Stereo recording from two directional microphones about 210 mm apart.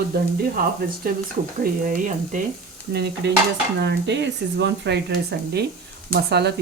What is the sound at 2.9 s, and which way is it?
Speech, 50° right (ahead or behind).